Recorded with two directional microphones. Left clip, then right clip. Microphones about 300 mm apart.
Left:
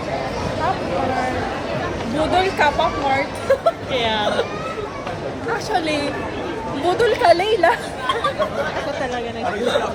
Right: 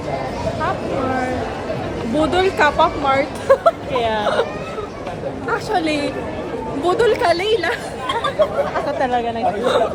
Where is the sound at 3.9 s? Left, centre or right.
Right.